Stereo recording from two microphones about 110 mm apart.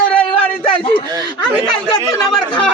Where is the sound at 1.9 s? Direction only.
35° left (ahead or behind).